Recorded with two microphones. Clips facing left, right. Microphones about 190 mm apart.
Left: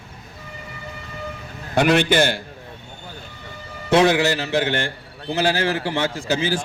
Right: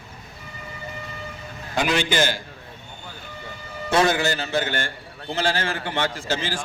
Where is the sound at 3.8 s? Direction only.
65° left (ahead or behind).